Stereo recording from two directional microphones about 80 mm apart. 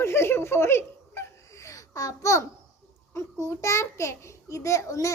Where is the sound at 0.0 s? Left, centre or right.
Left.